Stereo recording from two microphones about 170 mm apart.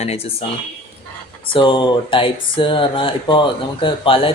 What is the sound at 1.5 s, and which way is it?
Speech, 30° left (ahead or behind).